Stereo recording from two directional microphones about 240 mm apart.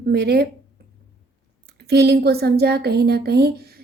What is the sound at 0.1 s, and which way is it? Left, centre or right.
Speech, right.